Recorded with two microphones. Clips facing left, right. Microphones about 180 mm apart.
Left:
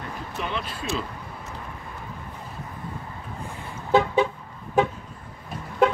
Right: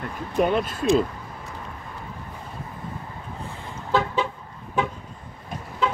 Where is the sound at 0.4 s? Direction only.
50° right (ahead or behind).